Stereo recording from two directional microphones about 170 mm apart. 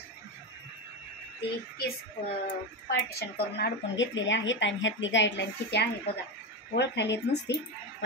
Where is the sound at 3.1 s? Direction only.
70° left (ahead or behind).